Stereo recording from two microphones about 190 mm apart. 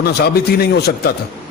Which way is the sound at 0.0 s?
55° left (ahead or behind).